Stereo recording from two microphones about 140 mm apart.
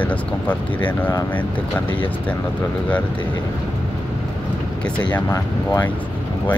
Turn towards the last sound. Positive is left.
turn(degrees=25)  # may be behind; listen again after turning